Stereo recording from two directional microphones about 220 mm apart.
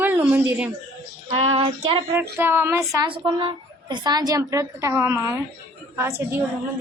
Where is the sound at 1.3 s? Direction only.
25° right (ahead or behind).